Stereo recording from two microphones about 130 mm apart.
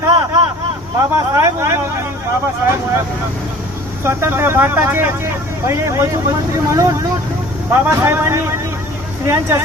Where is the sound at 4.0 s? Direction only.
20° right (ahead or behind).